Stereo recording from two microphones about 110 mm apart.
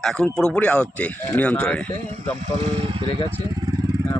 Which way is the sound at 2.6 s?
65° right (ahead or behind).